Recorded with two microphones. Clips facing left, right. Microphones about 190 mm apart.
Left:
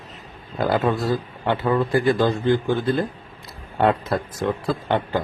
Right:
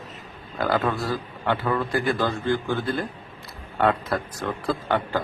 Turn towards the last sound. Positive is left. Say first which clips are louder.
# left 2 dB
turn(degrees=20)  # may be behind; listen again after turning